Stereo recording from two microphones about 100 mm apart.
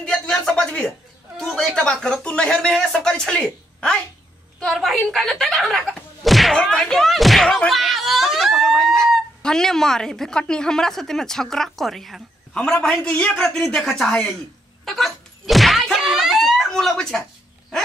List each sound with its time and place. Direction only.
0.0 s a sound: 10° left (ahead or behind)
1.4 s speech: 5° left (ahead or behind)
14.9 s thunk: centre (ahead or behind)